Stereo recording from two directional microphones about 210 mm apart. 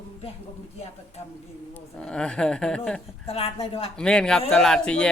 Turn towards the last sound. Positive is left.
turn(degrees=5)  # may be behind; listen again after turning